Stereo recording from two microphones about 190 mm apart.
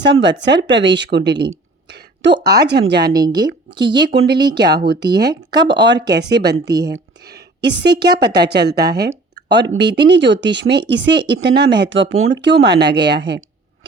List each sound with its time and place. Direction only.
0.0 s speech: 65° right (ahead or behind)
1.9 s a sound: 65° right (ahead or behind)
2.6 s speech: 55° right (ahead or behind)
3.0 s a woman's voice: 20° right (ahead or behind)
4.1 s speech: 65° right (ahead or behind)
5.3 s a woman's voice: 20° right (ahead or behind)
5.6 s speech: 65° right (ahead or behind)
6.7 s a woman's voice: 20° right (ahead or behind)
6.9 s a sound: 60° right (ahead or behind)
8.2 s speech: 60° right (ahead or behind)